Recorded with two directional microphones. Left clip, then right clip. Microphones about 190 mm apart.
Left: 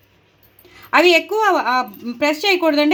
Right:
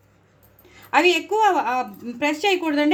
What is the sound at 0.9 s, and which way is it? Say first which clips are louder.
A woman's voice: left 5 dB; 25° left (ahead or behind).